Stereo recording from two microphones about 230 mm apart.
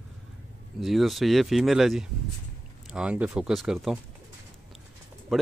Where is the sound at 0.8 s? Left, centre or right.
Centre.